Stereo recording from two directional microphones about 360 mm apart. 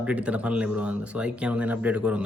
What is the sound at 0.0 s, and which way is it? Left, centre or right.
Speech, centre.